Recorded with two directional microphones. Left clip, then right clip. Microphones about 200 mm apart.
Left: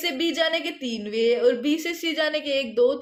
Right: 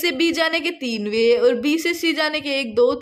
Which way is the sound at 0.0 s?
60° right (ahead or behind).